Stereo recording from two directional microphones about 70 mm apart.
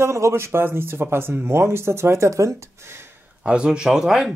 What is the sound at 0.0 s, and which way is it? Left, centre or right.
Speech, right.